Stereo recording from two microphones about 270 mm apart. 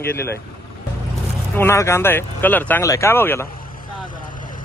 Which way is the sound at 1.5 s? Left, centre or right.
Centre.